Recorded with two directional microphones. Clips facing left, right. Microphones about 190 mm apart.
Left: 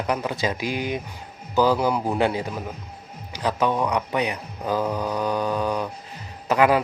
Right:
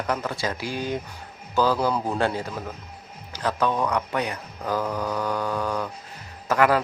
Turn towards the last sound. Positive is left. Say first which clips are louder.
# left 2 dB
turn(degrees=15)  # may be behind; listen again after turning